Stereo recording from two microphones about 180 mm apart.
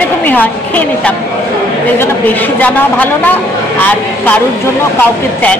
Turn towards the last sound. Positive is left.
turn(degrees=10)  # may be behind; listen again after turning